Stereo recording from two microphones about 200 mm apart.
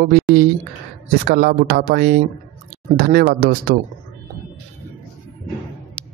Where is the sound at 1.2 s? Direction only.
50° right (ahead or behind).